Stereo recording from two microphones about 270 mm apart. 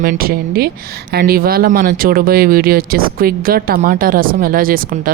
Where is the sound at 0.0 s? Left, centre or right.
Right.